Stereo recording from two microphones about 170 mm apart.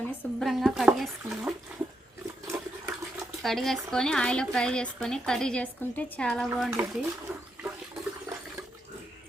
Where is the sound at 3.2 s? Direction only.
Centre (ahead or behind).